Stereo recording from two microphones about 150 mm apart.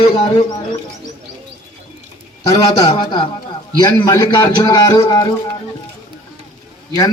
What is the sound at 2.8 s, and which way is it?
A man's voice, 30° left (ahead or behind).